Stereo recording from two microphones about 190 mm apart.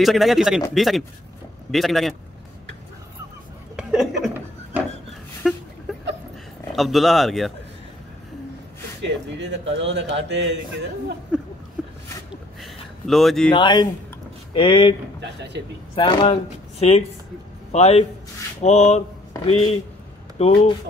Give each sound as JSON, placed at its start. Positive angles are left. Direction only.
{"t": 0.0, "sound": "speech", "side_deg": 0}
{"t": 3.7, "sound": "a sound", "side_deg": -5}
{"t": 4.2, "sound": "chuckle", "side_deg": -10}
{"t": 5.4, "sound": "a sound", "side_deg": 0}
{"t": 6.7, "sound": "speech", "side_deg": 0}
{"t": 9.0, "sound": "speech", "side_deg": -70}
{"t": 12.6, "sound": "a sound", "side_deg": 0}
{"t": 13.5, "sound": "speech", "side_deg": 25}
{"t": 15.1, "sound": "speech", "side_deg": -65}
{"t": 15.9, "sound": "a man's voice", "side_deg": 25}
{"t": 18.6, "sound": "a sound", "side_deg": 35}
{"t": 20.3, "sound": "speech", "side_deg": 30}